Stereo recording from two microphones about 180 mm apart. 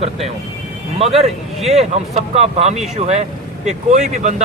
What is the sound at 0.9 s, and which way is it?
Speech, 35° right (ahead or behind).